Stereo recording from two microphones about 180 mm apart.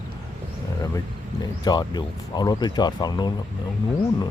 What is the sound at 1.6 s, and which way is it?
Speech, 20° left (ahead or behind).